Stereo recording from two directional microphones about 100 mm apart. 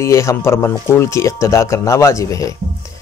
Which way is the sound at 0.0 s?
30° left (ahead or behind).